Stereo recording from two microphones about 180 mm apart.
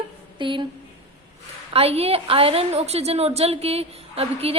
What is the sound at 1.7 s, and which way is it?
A woman's voice, 35° right (ahead or behind).